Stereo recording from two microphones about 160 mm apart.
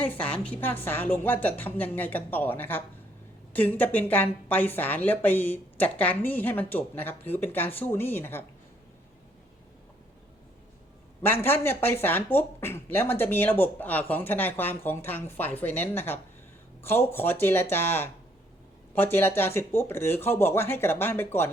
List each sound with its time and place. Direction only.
0.1 s speech: 10° left (ahead or behind)
11.2 s speech: 15° left (ahead or behind)